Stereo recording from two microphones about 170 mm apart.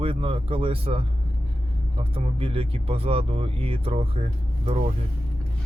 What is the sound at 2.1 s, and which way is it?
Speech, 35° right (ahead or behind).